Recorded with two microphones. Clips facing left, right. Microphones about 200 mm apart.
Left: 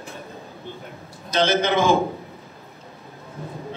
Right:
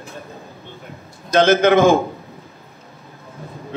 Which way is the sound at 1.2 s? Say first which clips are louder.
Right 7 dB; 50° right (ahead or behind).